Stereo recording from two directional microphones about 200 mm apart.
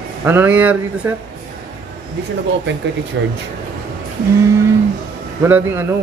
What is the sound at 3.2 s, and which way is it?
Speech, 70° right (ahead or behind).